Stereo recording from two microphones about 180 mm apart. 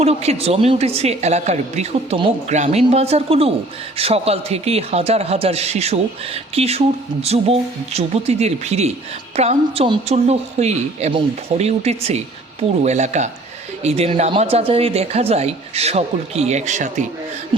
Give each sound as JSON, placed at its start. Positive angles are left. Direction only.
{"t": 0.0, "sound": "speech", "side_deg": -35}